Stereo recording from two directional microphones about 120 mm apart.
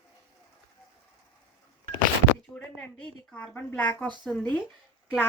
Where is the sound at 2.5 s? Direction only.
10° left (ahead or behind).